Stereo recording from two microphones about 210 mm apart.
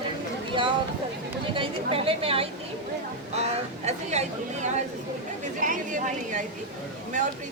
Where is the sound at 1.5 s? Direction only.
25° right (ahead or behind).